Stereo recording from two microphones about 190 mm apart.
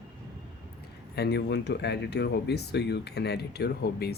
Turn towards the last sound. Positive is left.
turn(degrees=60)  # may be behind; listen again after turning